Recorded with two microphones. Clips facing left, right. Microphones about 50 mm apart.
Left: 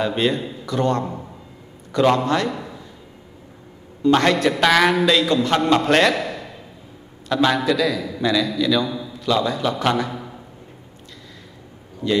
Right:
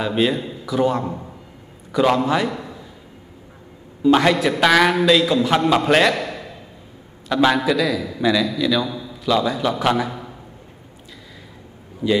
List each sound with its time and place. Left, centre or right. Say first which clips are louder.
0.0 s a man's voice: right 1 dB; centre
4.0 s a man's voice: right 1 dB; centre
12.0 s a man's voice: right 2 dB; centre